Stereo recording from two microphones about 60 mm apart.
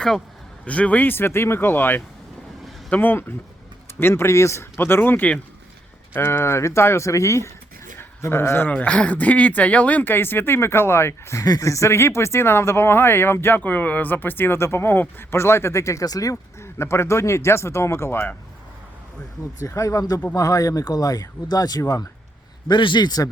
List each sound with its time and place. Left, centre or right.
0.6 s speech: left
4.0 s speech: left
7.9 s a sound: left
8.8 s speech: left
11.4 s speech: left
13.6 s speech: left
16.6 s speech: left
19.6 s speech: left
23.2 s speech: left